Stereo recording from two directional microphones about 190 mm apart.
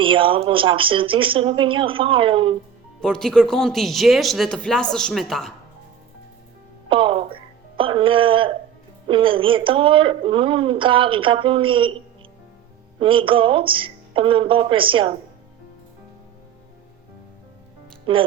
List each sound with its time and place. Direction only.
0.0 s speech: 25° right (ahead or behind)
3.0 s speech: 5° left (ahead or behind)
6.8 s speech: 25° right (ahead or behind)
13.0 s speech: 25° right (ahead or behind)
18.0 s speech: 25° right (ahead or behind)